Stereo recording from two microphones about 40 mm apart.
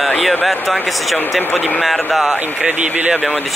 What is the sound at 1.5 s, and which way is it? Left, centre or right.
Speech, left.